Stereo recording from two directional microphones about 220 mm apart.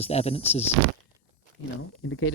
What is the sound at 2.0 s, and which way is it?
Speech, 65° left (ahead or behind).